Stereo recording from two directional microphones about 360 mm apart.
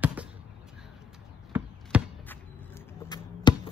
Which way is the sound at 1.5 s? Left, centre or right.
Centre.